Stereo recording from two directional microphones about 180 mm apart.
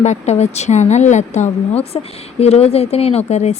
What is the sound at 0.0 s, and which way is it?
Speech, 40° left (ahead or behind).